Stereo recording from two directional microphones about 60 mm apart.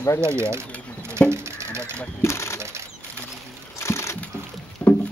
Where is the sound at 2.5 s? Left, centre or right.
Right.